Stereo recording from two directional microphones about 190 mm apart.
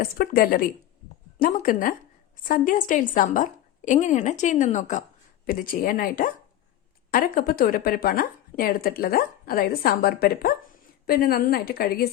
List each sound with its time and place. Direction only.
0.0 s a woman's voice: 50° left (ahead or behind)